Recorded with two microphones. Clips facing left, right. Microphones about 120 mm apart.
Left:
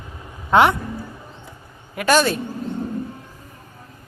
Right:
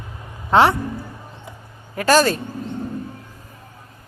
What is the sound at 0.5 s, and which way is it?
Speech, 30° right (ahead or behind).